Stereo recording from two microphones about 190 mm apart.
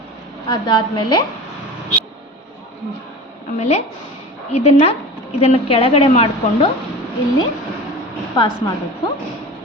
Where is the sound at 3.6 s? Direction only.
35° left (ahead or behind).